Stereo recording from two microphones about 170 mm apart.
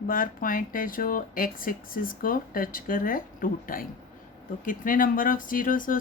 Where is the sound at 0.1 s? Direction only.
55° left (ahead or behind).